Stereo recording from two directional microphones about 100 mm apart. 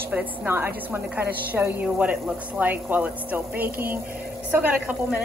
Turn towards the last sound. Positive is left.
turn(degrees=-20)  # may be behind; listen again after turning